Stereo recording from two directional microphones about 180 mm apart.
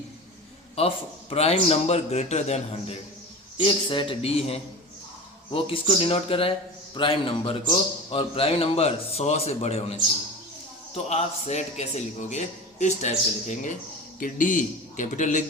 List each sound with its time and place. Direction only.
0.8 s a man's voice: 30° left (ahead or behind)